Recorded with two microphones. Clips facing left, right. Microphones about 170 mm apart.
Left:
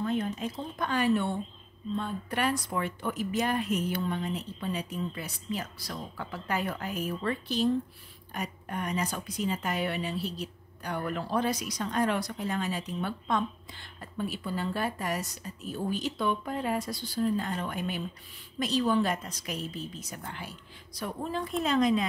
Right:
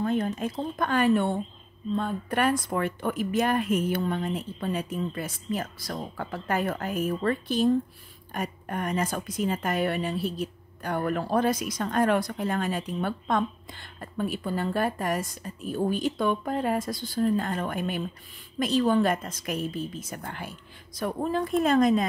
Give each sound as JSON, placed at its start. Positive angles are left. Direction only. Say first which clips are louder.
{"t": 0.0, "sound": "a woman's voice", "louder": "right 4 dB", "side_deg": -50}